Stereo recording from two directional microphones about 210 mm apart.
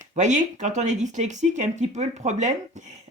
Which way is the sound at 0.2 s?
35° right (ahead or behind).